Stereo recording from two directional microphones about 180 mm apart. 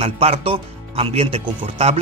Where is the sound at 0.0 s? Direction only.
35° right (ahead or behind).